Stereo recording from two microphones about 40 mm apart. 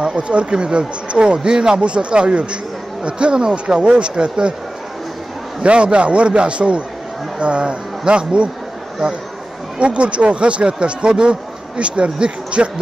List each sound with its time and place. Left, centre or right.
0.0 s speech: right
5.6 s speech: right
9.8 s speech: right